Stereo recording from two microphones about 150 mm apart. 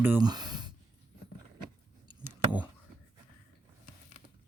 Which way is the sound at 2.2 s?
10° right (ahead or behind).